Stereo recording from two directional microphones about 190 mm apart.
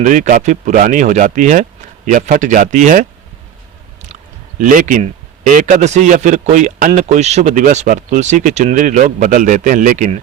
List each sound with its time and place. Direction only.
0.0 s speech: 40° right (ahead or behind)
4.6 s a man's voice: 45° right (ahead or behind)